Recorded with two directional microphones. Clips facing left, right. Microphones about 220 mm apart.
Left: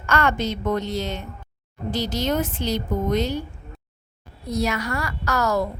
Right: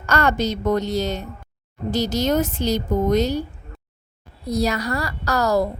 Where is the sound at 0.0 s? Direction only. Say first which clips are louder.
Right 2 dB; 40° right (ahead or behind).